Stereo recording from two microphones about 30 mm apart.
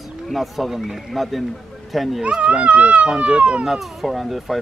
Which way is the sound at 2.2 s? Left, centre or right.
Right.